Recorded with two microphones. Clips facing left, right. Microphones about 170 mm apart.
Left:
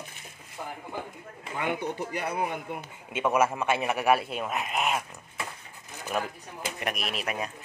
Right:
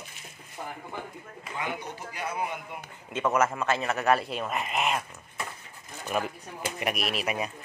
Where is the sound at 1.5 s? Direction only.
60° left (ahead or behind).